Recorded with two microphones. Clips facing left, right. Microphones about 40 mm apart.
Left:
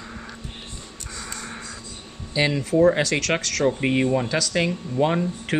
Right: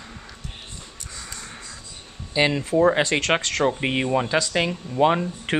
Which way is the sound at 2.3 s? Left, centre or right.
Centre.